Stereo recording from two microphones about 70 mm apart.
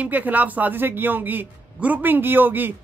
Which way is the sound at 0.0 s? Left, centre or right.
Right.